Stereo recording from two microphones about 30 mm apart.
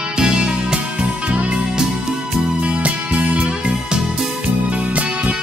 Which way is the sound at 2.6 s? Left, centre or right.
Right.